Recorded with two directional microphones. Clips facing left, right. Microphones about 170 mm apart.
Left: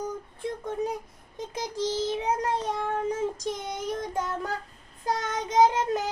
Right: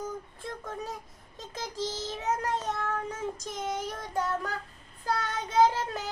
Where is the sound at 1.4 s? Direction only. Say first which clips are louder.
Left 5 dB; 20° left (ahead or behind).